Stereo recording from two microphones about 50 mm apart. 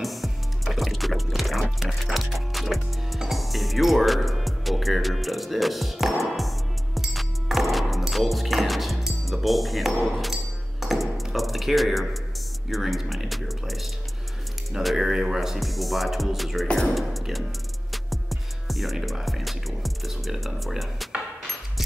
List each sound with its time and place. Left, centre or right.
0.0 s music: centre
11.3 s a sound: centre
12.6 s speech: centre
17.9 s music: centre